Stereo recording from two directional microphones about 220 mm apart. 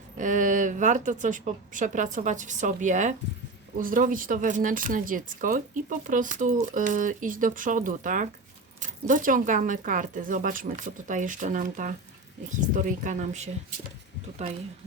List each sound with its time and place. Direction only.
0.2 s speech: 35° right (ahead or behind)